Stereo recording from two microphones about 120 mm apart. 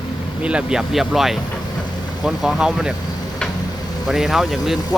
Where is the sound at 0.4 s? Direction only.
5° right (ahead or behind).